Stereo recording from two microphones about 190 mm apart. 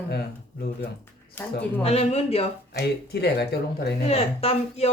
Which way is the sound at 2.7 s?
60° left (ahead or behind).